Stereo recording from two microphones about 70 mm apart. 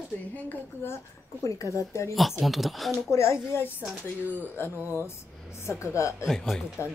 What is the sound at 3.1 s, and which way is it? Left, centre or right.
Speech, left.